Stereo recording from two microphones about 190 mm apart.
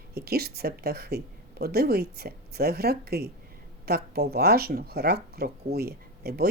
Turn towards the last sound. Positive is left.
turn(degrees=-55)  # may be behind; listen again after turning